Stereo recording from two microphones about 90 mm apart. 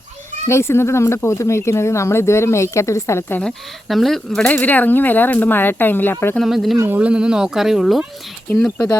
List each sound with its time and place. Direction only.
0.4 s speech: 30° left (ahead or behind)
3.4 s speech: centre (ahead or behind)
4.4 s speech: 20° left (ahead or behind)
6.4 s speech: centre (ahead or behind)
6.8 s speech: 20° right (ahead or behind)
7.1 s speech: 10° right (ahead or behind)